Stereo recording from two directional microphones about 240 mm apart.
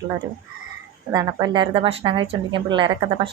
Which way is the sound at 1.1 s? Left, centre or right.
Centre.